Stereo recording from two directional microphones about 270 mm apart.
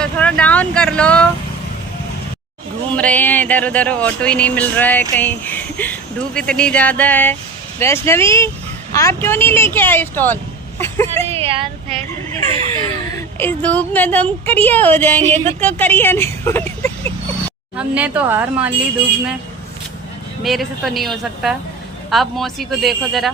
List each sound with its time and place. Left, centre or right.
0.0 s speech: centre
2.9 s a woman's voice: centre
10.8 s a sound: centre
11.3 s speech: right
12.5 s laughter: right
13.1 s a woman's voice: centre
17.7 s speech: centre
20.4 s speech: centre